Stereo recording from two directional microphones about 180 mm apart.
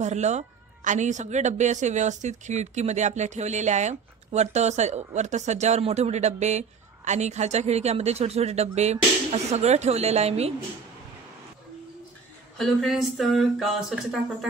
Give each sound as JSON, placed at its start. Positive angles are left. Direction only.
{"t": 0.0, "sound": "speech", "side_deg": -40}
{"t": 12.5, "sound": "speech", "side_deg": 0}